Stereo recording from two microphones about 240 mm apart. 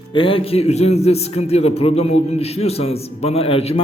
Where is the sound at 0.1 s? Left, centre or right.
Left.